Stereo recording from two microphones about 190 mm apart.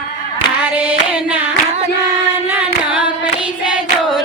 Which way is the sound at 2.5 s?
5° right (ahead or behind).